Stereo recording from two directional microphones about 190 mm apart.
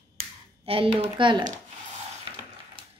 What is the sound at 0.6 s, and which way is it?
Speech, 30° right (ahead or behind).